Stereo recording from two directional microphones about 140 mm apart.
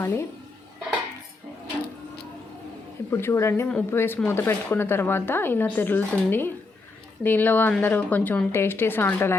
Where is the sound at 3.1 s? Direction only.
20° left (ahead or behind).